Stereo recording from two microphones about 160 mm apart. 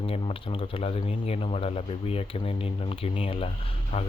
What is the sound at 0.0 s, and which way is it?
Speech, 35° left (ahead or behind).